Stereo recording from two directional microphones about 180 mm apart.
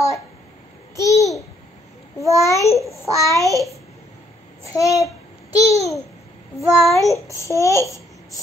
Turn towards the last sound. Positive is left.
turn(degrees=15)  # may be behind; listen again after turning